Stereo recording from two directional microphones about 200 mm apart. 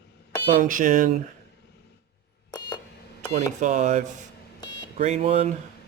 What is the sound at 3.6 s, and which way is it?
A man's voice, 35° right (ahead or behind).